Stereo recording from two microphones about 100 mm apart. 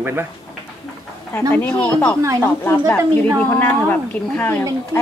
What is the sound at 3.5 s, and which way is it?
Speech, 20° left (ahead or behind).